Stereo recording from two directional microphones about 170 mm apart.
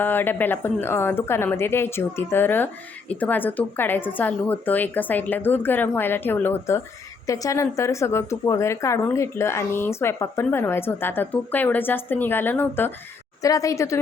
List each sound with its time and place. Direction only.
0.0 s a woman's voice: 10° left (ahead or behind)